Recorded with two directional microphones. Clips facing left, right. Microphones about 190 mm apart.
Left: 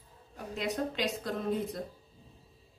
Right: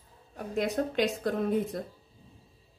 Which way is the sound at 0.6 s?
55° right (ahead or behind).